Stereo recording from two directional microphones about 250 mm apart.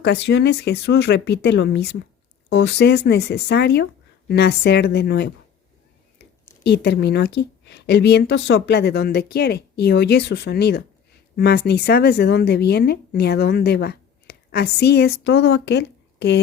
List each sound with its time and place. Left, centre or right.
0.0 s speech: left
6.7 s speech: left